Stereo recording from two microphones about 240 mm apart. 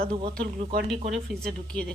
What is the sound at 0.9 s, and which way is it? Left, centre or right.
Speech, centre.